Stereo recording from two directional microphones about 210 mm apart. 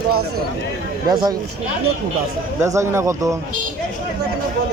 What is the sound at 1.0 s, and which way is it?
Speech, 20° right (ahead or behind).